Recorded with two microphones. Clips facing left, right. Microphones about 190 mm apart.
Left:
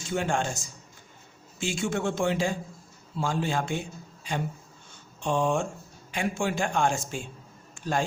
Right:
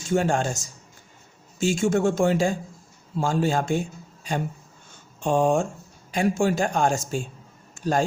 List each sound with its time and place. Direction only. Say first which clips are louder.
0.1 s a man's voice: right 5 dB; 40° right (ahead or behind)